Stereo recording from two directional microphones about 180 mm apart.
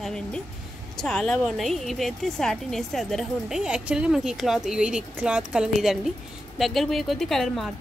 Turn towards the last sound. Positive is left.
turn(degrees=0)  # may be behind; listen again after turning